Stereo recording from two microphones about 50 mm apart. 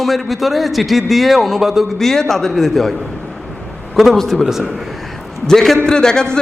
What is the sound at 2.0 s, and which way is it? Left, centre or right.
Speech, centre.